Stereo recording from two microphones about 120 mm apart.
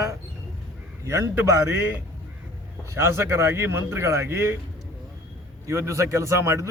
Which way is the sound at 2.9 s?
20° right (ahead or behind).